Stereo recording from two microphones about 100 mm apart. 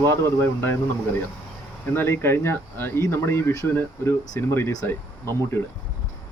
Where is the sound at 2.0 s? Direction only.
25° left (ahead or behind).